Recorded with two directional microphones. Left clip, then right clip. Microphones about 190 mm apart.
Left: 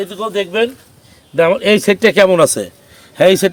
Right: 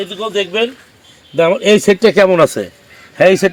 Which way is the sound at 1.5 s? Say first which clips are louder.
Right 3 dB; 30° right (ahead or behind).